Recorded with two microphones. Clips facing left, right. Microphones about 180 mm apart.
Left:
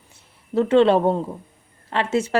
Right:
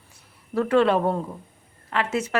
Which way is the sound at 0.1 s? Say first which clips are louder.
Left 5 dB; 25° left (ahead or behind).